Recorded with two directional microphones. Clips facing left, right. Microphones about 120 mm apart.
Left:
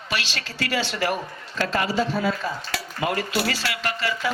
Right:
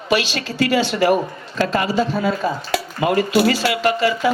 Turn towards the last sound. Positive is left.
turn(degrees=-15)  # may be behind; listen again after turning